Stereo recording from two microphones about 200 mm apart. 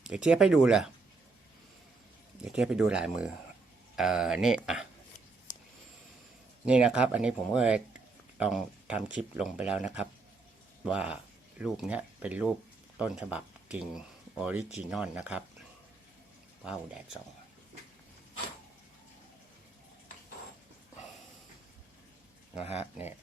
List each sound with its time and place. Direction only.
0.0 s speech: 5° right (ahead or behind)
2.4 s speech: 5° right (ahead or behind)
6.7 s speech: 5° right (ahead or behind)
16.6 s speech: 5° right (ahead or behind)